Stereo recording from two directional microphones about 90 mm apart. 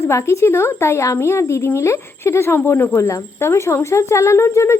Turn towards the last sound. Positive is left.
turn(degrees=30)  # may be behind; listen again after turning